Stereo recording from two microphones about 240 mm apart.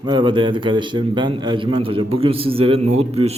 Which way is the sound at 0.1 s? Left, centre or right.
Centre.